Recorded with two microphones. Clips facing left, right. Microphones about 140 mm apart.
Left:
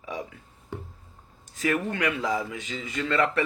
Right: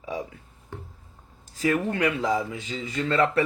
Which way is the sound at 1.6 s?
30° right (ahead or behind).